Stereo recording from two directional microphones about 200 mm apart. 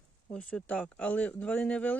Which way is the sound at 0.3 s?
5° left (ahead or behind).